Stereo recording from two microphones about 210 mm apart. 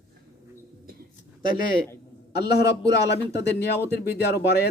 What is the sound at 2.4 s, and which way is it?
Speech, 50° left (ahead or behind).